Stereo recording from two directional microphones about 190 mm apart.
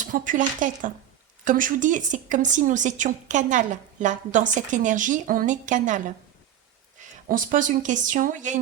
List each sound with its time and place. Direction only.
0.0 s speech: 45° right (ahead or behind)